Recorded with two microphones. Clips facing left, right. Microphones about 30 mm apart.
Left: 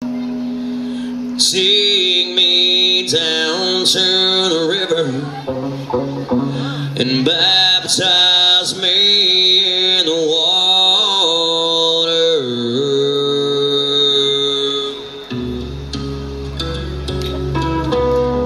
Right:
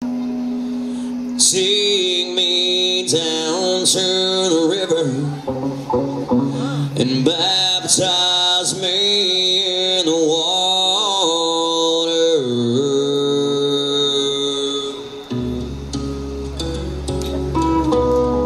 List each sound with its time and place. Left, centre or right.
1.4 s mantra: left
5.9 s music: left
7.0 s mantra: left
17.6 s music: left